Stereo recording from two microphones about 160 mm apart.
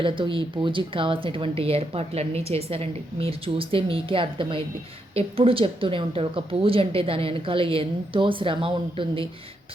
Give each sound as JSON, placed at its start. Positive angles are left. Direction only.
{"t": 0.0, "sound": "speech", "side_deg": -30}